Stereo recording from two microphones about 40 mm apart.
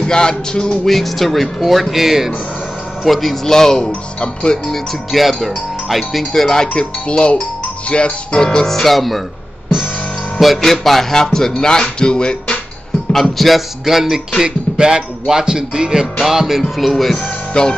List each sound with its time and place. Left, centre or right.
0.0 s music: left
0.8 s speech: centre
4.2 s music: left
5.1 s speech: centre
10.4 s speech: centre; by 12.4 s left
13.1 s speech: centre
14.4 s music: centre
16.6 s speech: centre
17.6 s music: left